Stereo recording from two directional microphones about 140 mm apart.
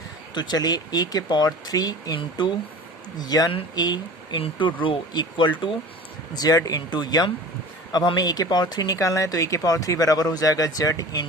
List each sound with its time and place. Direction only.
0.3 s speech: 30° left (ahead or behind)